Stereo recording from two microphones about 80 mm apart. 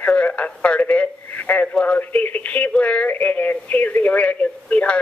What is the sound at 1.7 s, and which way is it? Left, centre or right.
Speech, centre.